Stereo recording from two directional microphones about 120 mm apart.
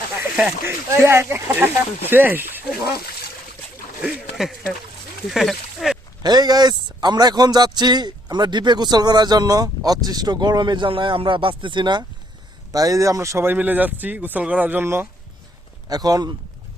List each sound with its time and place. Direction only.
0.3 s speech: 15° right (ahead or behind)
4.0 s speech: centre (ahead or behind)
6.2 s a man's voice: 35° right (ahead or behind)
12.7 s speech: 30° right (ahead or behind)
15.9 s a man's voice: 30° right (ahead or behind)